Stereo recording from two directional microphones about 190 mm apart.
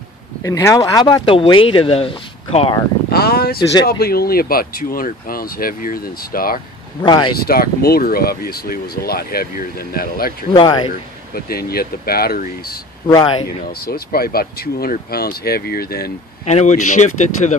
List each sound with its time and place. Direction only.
0.4 s speech: 15° left (ahead or behind)
3.1 s a sound: 55° left (ahead or behind)
3.8 s speech: 55° left (ahead or behind)
7.0 s speech: 25° left (ahead or behind)
7.3 s speech: 50° left (ahead or behind)
10.5 s speech: 25° left (ahead or behind)
11.3 s speech: 50° left (ahead or behind)
13.0 s speech: 20° left (ahead or behind)
13.7 s speech: 55° left (ahead or behind)
16.4 s speech: 35° left (ahead or behind)